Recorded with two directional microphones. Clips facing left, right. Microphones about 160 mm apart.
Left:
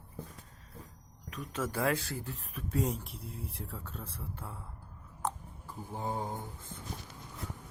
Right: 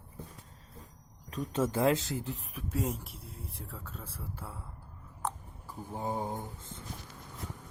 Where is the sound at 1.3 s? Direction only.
30° right (ahead or behind); by 4.6 s 5° right (ahead or behind).